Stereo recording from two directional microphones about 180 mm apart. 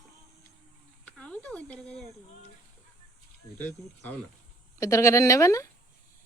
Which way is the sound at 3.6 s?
10° left (ahead or behind).